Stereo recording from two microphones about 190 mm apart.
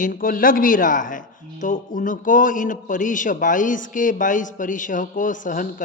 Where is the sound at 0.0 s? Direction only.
45° left (ahead or behind).